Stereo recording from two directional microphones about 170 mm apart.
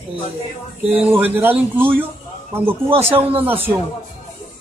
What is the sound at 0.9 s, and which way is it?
Speech, 10° right (ahead or behind).